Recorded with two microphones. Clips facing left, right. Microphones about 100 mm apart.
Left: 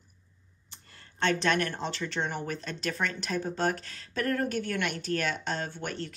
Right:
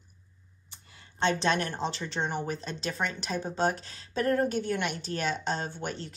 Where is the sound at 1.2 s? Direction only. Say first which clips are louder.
Even; 25° right (ahead or behind).